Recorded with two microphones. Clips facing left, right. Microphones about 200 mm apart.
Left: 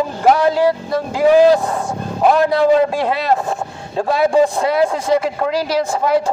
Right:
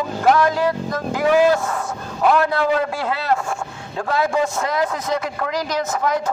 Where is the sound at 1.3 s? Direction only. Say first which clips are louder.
Left 5 dB; 35° left (ahead or behind).